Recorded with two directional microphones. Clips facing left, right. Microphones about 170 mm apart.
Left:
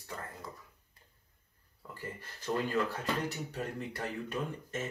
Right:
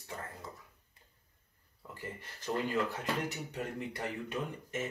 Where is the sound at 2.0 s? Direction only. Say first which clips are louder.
Left 1 dB; 20° right (ahead or behind).